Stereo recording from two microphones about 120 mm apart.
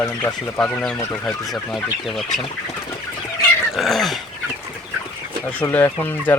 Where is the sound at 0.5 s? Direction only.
15° left (ahead or behind).